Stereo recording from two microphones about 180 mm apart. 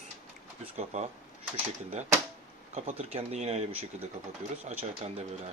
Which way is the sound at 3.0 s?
35° right (ahead or behind).